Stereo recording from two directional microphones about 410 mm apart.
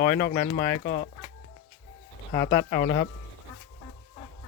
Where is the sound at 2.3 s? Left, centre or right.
Centre.